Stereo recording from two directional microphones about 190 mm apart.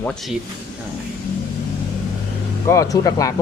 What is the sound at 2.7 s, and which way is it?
Speech, 15° left (ahead or behind).